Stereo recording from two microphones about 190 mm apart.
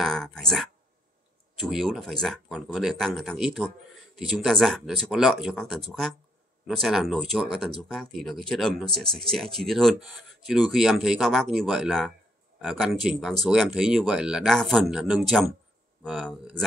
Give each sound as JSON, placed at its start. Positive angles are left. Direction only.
{"t": 0.0, "sound": "speech", "side_deg": 0}